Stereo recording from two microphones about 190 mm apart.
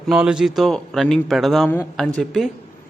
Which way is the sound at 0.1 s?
5° right (ahead or behind).